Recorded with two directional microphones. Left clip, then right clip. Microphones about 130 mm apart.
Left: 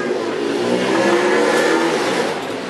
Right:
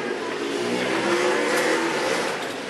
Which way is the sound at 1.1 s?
Centre (ahead or behind).